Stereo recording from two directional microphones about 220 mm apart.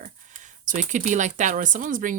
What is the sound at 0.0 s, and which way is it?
Speech, 35° right (ahead or behind).